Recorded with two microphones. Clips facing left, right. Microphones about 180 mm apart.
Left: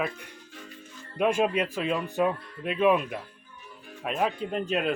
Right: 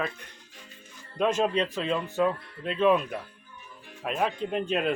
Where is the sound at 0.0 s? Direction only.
10° left (ahead or behind).